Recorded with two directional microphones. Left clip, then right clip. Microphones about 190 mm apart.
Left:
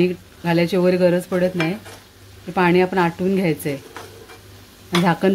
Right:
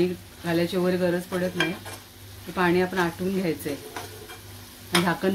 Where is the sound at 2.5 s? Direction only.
45° left (ahead or behind).